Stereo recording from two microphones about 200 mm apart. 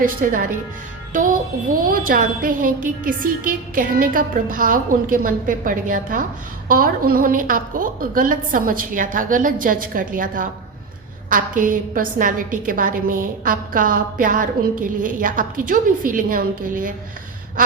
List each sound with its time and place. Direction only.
0.0 s a woman's voice: 45° right (ahead or behind)